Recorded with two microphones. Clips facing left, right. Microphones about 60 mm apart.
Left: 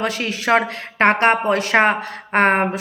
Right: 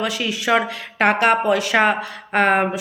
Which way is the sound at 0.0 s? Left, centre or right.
Left.